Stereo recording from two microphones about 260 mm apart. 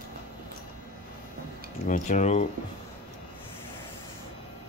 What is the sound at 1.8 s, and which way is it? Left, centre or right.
Speech, left.